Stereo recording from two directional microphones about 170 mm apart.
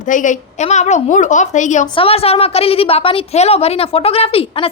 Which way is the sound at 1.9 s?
35° left (ahead or behind).